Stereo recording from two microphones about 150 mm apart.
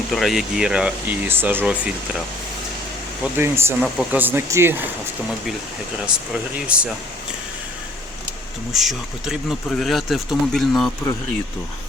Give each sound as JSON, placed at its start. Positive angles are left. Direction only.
{"t": 0.1, "sound": "speech", "side_deg": 0}
{"t": 3.3, "sound": "speech", "side_deg": -15}
{"t": 3.8, "sound": "speech", "side_deg": 0}
{"t": 4.2, "sound": "speech", "side_deg": -15}
{"t": 6.1, "sound": "speech", "side_deg": -5}
{"t": 8.7, "sound": "speech", "side_deg": 0}